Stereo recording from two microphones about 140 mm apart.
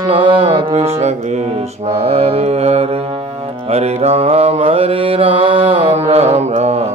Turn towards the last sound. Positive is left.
turn(degrees=-50)  # may be behind; listen again after turning